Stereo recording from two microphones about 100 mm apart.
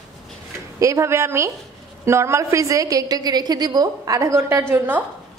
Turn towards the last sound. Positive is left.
turn(degrees=-30)  # may be behind; listen again after turning